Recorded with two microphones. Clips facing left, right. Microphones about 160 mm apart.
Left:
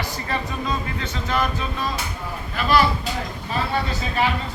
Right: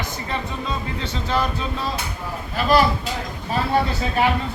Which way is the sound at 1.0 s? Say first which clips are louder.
Right 5 dB; 30° right (ahead or behind).